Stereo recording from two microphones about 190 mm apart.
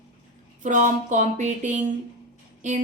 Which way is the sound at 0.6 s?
40° right (ahead or behind).